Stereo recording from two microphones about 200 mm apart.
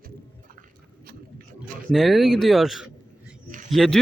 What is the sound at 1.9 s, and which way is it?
Speech, centre (ahead or behind).